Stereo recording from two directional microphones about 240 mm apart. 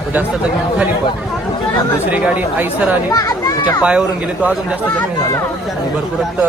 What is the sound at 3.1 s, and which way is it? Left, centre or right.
Speech, centre.